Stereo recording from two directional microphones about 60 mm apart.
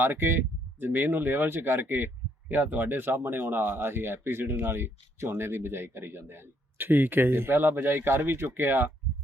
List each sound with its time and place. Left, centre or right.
0.0 s speech: right